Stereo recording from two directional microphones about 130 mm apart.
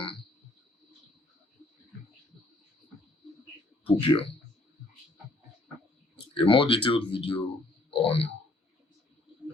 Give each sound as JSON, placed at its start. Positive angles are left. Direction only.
{"t": 3.8, "sound": "speech", "side_deg": 45}
{"t": 6.3, "sound": "speech", "side_deg": 40}
{"t": 7.9, "sound": "a sound", "side_deg": 45}